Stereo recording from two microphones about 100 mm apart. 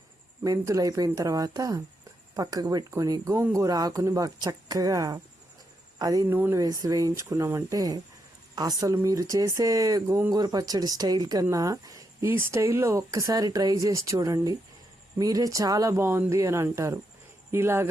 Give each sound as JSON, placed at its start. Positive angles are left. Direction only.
{"t": 0.4, "sound": "speech", "side_deg": -35}
{"t": 6.2, "sound": "speech", "side_deg": -20}
{"t": 6.6, "sound": "speech", "side_deg": -35}
{"t": 12.2, "sound": "speech", "side_deg": -25}